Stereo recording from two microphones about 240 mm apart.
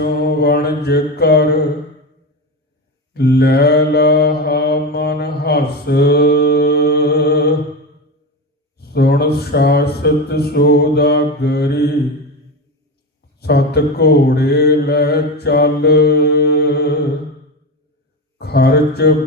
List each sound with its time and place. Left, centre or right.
0.0 s mantra: left
3.1 s mantra: left
8.8 s speech: left
13.4 s mantra: left
18.3 s speech: left